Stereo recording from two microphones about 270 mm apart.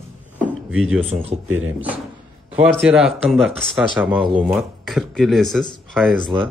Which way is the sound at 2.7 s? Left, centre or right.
Centre.